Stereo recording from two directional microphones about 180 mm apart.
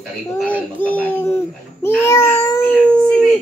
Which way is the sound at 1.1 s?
15° left (ahead or behind).